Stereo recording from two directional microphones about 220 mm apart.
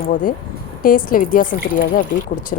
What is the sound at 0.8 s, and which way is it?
A woman's voice, 40° left (ahead or behind).